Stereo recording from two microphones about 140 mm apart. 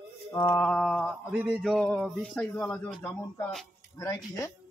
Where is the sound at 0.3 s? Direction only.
25° left (ahead or behind).